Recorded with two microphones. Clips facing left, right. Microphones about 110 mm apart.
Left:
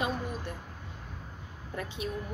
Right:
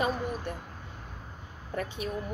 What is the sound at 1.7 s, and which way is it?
Speech, 50° right (ahead or behind).